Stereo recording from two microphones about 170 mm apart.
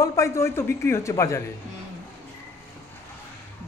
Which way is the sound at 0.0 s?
20° left (ahead or behind).